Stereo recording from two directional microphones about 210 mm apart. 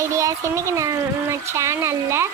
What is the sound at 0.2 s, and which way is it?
A child's voice, 15° right (ahead or behind).